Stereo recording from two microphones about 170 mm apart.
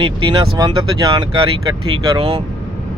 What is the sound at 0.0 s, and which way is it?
Speech, 30° right (ahead or behind).